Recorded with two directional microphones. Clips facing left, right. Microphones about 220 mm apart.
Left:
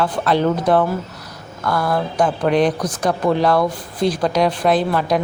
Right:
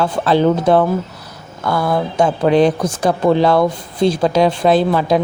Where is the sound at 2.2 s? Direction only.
25° right (ahead or behind).